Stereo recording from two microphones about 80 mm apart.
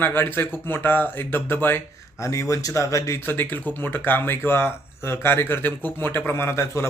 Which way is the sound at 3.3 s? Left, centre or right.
Left.